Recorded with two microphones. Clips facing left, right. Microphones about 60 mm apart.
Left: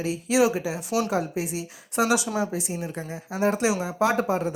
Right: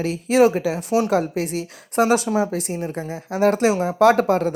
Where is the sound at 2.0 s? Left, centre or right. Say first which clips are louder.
Right 5 dB; right.